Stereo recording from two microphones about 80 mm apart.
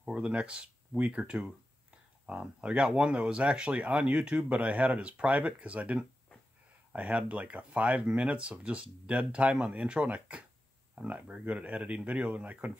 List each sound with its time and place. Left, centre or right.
0.0 s speech: centre